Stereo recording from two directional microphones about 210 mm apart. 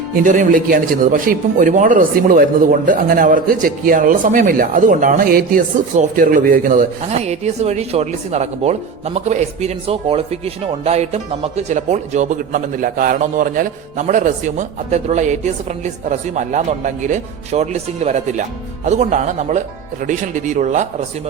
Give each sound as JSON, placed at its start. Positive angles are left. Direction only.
{"t": 0.2, "sound": "a man's voice", "side_deg": -40}